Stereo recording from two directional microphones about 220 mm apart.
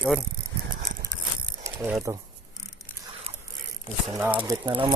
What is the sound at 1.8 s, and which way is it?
Speech, 10° right (ahead or behind).